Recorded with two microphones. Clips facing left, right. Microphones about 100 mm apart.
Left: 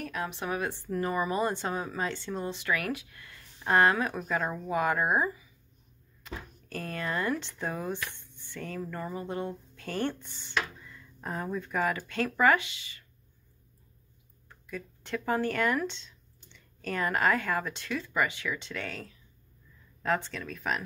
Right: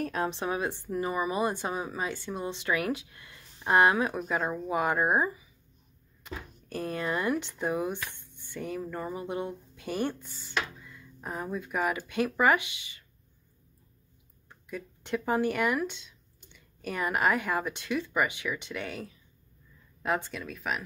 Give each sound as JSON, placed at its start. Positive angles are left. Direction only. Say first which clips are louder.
{"t": 0.0, "sound": "a woman's voice", "louder": "right 4 dB", "side_deg": -30}
{"t": 10.2, "sound": "speech", "louder": "even", "side_deg": 0}
{"t": 14.5, "sound": "a woman's voice", "louder": "right 1 dB", "side_deg": -20}
{"t": 20.5, "sound": "speech", "louder": "left 1 dB", "side_deg": -5}